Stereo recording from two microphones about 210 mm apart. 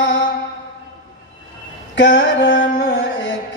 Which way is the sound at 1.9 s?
60° left (ahead or behind).